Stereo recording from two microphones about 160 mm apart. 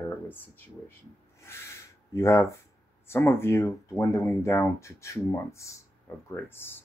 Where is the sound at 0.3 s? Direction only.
15° left (ahead or behind).